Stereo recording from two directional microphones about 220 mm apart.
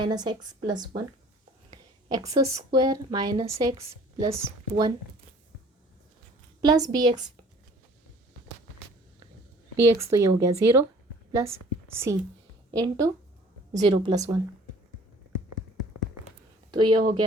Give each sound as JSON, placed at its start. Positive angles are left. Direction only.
{"t": 0.0, "sound": "a woman's voice", "side_deg": -20}
{"t": 6.6, "sound": "speech", "side_deg": -15}
{"t": 9.7, "sound": "a woman's voice", "side_deg": -10}
{"t": 16.7, "sound": "a woman's voice", "side_deg": -20}